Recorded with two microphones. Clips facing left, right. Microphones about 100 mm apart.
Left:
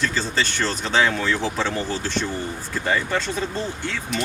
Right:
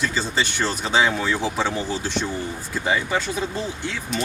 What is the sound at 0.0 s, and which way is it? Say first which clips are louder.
Speech: even; 15° right (ahead or behind).